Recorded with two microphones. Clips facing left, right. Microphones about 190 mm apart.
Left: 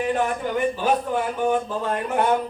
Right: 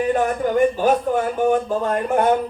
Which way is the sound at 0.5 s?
45° right (ahead or behind).